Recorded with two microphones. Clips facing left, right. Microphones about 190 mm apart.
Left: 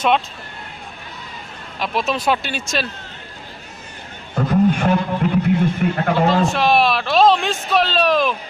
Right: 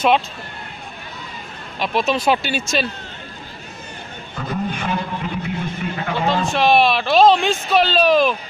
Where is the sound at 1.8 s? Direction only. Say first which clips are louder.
Right 2 dB; centre (ahead or behind).